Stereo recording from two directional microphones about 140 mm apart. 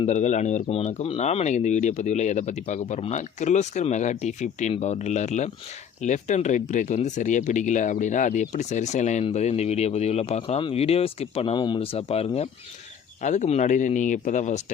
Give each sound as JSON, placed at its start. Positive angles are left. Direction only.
{"t": 0.0, "sound": "speech", "side_deg": 55}
{"t": 13.2, "sound": "speech", "side_deg": 55}